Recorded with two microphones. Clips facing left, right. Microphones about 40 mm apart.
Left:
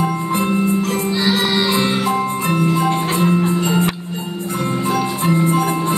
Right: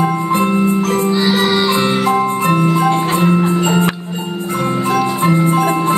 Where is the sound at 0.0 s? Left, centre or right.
Centre.